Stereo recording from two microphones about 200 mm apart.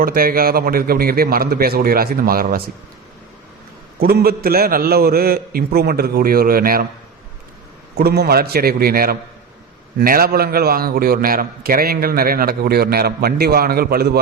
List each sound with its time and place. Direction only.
0.0 s a man's voice: 45° right (ahead or behind)
4.0 s a man's voice: 50° right (ahead or behind)
7.9 s a man's voice: 50° right (ahead or behind)